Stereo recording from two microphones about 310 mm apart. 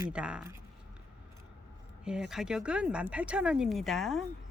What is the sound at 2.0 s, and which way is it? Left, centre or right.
Speech, centre.